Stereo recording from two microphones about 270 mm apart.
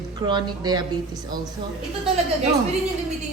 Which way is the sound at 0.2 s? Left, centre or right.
Centre.